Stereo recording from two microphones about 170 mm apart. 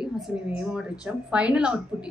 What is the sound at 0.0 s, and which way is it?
Speech, 5° right (ahead or behind).